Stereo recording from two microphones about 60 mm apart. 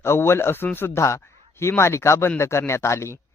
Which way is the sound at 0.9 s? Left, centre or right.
Left.